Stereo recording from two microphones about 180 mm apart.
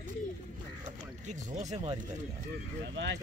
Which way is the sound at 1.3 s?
40° right (ahead or behind).